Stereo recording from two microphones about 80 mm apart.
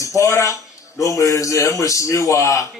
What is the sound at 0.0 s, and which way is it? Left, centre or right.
A man's voice, left.